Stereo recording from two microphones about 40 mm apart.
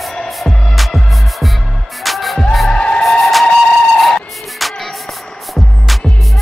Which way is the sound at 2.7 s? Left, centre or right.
Left.